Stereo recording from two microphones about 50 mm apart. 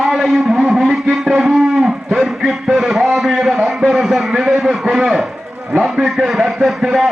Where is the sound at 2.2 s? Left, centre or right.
Centre.